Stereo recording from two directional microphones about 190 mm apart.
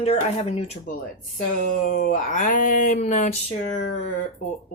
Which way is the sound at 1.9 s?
45° left (ahead or behind).